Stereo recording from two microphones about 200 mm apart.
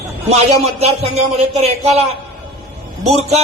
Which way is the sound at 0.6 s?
30° right (ahead or behind).